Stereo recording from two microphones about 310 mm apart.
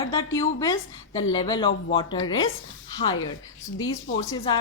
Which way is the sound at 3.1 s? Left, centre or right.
Left.